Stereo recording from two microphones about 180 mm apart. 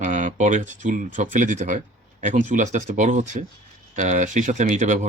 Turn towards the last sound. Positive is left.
turn(degrees=-40)  # may be behind; listen again after turning